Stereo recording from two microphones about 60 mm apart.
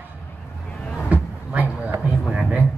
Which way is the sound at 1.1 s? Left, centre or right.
Right.